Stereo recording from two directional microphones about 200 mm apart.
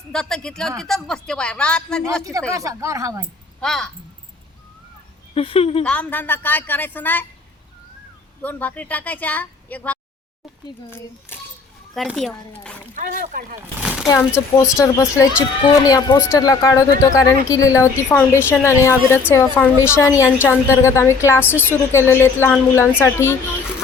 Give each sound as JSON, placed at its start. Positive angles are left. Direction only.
{"t": 0.1, "sound": "speech", "side_deg": 5}
{"t": 2.5, "sound": "a woman's voice", "side_deg": -15}
{"t": 3.6, "sound": "speech", "side_deg": 0}
{"t": 5.3, "sound": "speech", "side_deg": 25}
{"t": 5.8, "sound": "speech", "side_deg": 5}
{"t": 8.4, "sound": "speech", "side_deg": 10}
{"t": 11.9, "sound": "speech", "side_deg": 0}
{"t": 12.9, "sound": "speech", "side_deg": -40}
{"t": 13.6, "sound": "speech", "side_deg": -5}
{"t": 14.8, "sound": "speech", "side_deg": 15}